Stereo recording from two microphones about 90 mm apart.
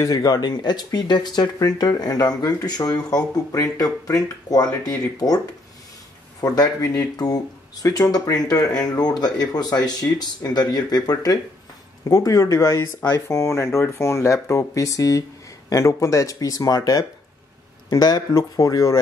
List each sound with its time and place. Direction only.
0.0 s speech: 45° left (ahead or behind)
6.4 s speech: 45° left (ahead or behind)